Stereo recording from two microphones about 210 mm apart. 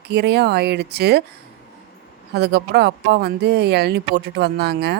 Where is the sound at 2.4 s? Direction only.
50° right (ahead or behind).